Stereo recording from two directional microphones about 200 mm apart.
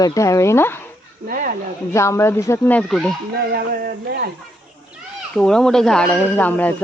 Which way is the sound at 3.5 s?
50° right (ahead or behind).